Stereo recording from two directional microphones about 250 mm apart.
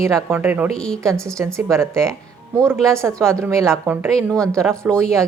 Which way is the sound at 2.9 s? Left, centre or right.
Centre.